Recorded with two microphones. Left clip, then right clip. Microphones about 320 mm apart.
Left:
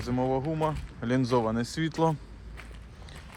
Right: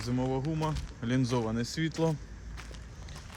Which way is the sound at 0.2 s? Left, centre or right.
Left.